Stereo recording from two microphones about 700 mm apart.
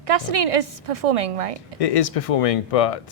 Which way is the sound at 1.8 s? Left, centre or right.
Left.